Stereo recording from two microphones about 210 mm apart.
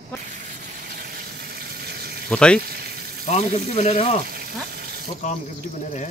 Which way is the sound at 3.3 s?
30° left (ahead or behind).